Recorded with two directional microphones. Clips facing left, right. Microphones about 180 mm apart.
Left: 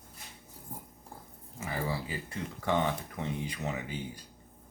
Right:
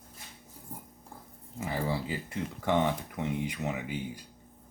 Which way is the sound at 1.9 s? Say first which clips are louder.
Right 3 dB; 20° right (ahead or behind).